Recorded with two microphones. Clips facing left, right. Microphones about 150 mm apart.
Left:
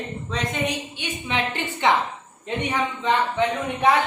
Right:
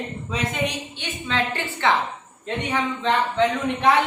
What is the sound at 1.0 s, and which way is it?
Speech, 15° left (ahead or behind).